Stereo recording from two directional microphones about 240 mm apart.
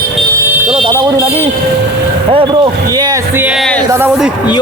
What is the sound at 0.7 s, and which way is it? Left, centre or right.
Vehicle, right.